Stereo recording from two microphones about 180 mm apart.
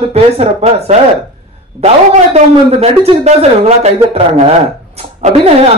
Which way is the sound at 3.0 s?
35° right (ahead or behind).